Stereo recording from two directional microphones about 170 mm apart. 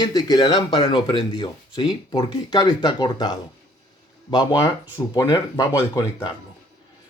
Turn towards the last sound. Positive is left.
turn(degrees=15)  # may be behind; listen again after turning